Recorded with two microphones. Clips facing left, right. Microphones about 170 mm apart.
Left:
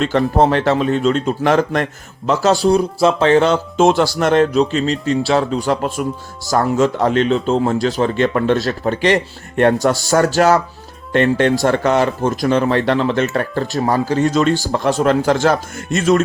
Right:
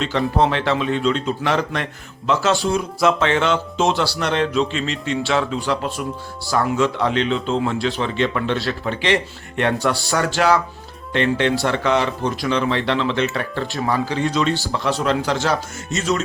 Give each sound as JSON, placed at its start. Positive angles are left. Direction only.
{"t": 0.0, "sound": "speech", "side_deg": 50}